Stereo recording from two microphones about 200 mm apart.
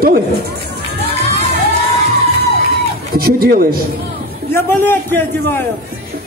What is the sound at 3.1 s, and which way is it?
Speech, 50° right (ahead or behind).